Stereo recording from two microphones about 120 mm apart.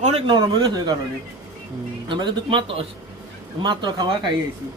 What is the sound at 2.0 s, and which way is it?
A man's voice, 40° right (ahead or behind).